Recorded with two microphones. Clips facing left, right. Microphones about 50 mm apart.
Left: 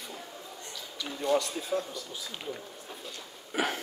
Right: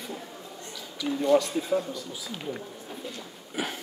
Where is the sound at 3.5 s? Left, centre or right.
Left.